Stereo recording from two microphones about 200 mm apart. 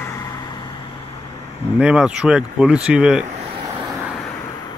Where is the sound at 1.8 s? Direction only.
5° right (ahead or behind).